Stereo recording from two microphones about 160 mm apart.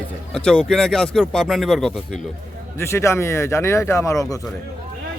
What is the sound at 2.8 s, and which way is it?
A man's voice, 15° left (ahead or behind).